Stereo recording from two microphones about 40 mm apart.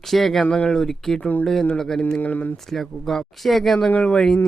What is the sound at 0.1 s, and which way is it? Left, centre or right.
Speech, centre.